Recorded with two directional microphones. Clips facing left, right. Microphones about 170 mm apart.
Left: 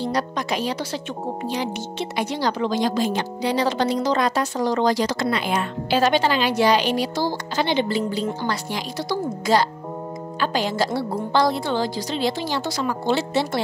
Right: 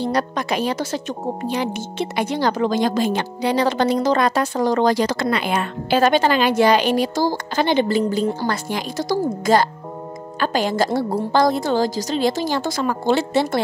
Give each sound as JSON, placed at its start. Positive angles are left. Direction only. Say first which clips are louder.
{"t": 0.0, "sound": "speech", "louder": "right 3 dB", "side_deg": -55}